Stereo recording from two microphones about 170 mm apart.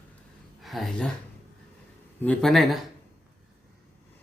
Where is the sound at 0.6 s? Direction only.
Centre (ahead or behind).